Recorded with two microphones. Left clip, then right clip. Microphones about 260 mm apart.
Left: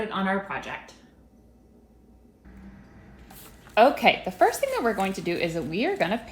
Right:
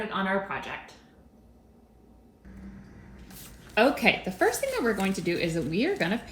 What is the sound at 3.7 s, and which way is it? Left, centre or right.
Speech, left.